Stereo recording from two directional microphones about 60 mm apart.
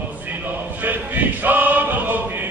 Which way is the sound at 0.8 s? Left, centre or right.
Right.